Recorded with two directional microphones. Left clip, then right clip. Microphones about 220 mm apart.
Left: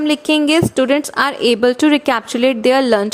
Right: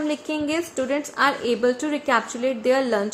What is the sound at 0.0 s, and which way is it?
A woman's voice, 45° left (ahead or behind).